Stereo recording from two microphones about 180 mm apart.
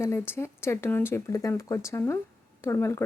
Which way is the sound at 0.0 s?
15° left (ahead or behind).